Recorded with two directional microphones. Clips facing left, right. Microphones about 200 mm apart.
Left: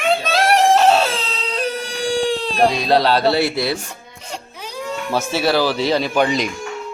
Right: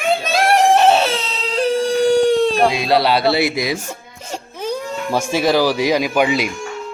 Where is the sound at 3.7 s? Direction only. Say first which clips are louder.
Right 4 dB; 45° right (ahead or behind).